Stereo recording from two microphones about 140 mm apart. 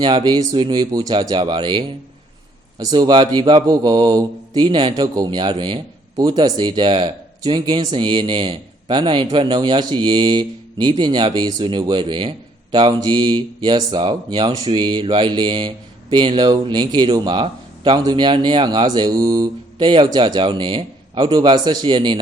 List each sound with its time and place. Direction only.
0.0 s speech: 30° right (ahead or behind)